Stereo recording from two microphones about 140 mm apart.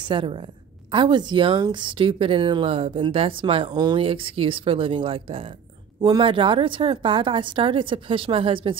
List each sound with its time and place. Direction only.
0.0 s speech: 35° right (ahead or behind)
5.9 s speech: 30° right (ahead or behind)